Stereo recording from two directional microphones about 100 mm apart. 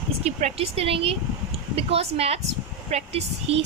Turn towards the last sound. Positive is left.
turn(degrees=-90)